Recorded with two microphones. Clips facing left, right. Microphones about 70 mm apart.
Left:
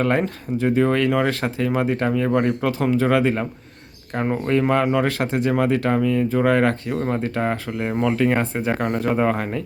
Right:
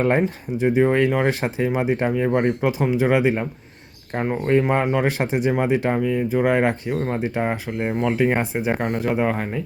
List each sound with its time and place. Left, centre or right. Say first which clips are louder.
0.0 s speech: right 1 dB; centre
4.7 s speech: left 1 dB; right
8.9 s speech: left 1 dB; centre